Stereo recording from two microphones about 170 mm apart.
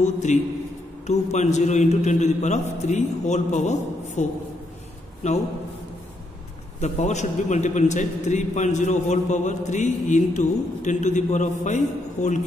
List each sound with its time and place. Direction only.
0.0 s a man's voice: 45° left (ahead or behind)
6.8 s a man's voice: 45° left (ahead or behind)